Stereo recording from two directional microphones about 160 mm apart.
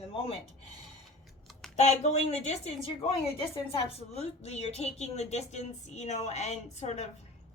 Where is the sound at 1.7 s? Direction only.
45° left (ahead or behind).